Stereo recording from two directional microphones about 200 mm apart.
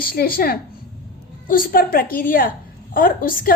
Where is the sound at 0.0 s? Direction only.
50° left (ahead or behind).